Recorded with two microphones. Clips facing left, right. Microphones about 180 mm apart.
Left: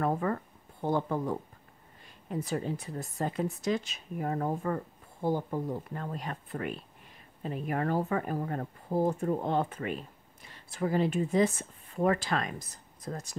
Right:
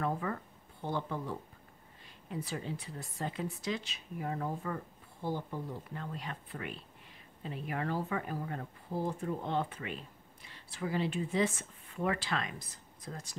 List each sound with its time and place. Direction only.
0.0 s speech: 45° left (ahead or behind)